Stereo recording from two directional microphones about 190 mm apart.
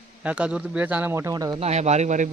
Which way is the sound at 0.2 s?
5° right (ahead or behind).